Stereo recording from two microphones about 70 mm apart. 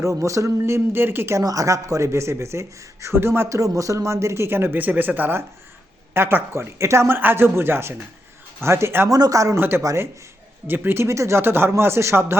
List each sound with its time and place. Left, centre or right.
0.0 s speech: right
1.4 s speech: right
7.2 s speech: right
9.0 s speech: right
9.6 s speech: right